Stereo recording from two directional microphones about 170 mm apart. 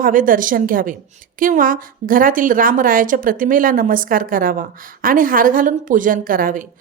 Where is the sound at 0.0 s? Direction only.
55° right (ahead or behind).